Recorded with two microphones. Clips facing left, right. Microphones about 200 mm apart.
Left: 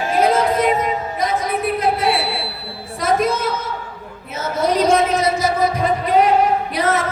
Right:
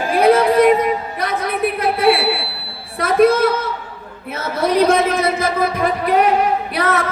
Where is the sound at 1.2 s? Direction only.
65° right (ahead or behind).